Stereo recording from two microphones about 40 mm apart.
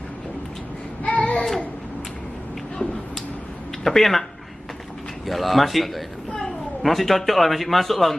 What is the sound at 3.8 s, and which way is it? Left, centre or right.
Speech, centre.